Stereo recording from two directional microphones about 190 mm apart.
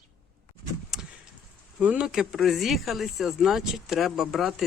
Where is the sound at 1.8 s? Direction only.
5° right (ahead or behind).